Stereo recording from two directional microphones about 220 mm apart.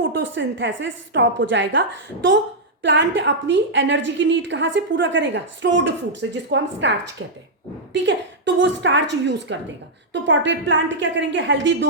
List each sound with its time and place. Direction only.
0.1 s a woman's voice: 55° right (ahead or behind)
7.9 s a woman's voice: 55° right (ahead or behind)